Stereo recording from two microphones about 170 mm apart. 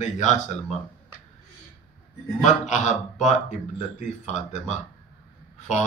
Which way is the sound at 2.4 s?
45° left (ahead or behind).